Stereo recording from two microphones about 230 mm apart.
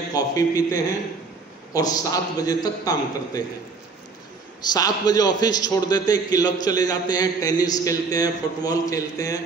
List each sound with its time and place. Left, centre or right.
0.1 s a man's voice: centre
4.6 s a man's voice: centre